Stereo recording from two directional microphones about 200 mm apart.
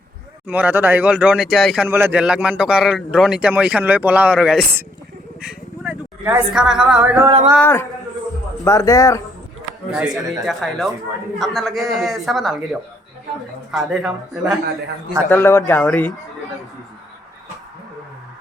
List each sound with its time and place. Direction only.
0.4 s speech: 10° right (ahead or behind)
5.4 s a sound: 5° right (ahead or behind)
7.0 s speech: 10° right (ahead or behind)
7.6 s speech: 10° left (ahead or behind)
10.1 s speech: 15° right (ahead or behind)
10.4 s a man's voice: centre (ahead or behind)
13.7 s a man's voice: centre (ahead or behind)
15.3 s speech: 10° left (ahead or behind)